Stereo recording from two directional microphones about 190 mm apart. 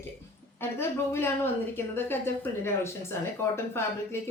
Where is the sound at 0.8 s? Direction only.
10° left (ahead or behind).